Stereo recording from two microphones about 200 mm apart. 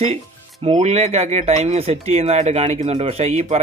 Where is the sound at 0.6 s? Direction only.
35° right (ahead or behind).